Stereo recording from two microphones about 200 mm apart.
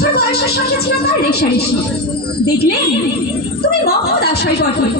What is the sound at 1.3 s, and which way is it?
Speech, 50° left (ahead or behind).